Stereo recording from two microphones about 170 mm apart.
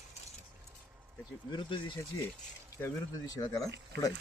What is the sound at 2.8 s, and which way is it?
Speech, 20° left (ahead or behind).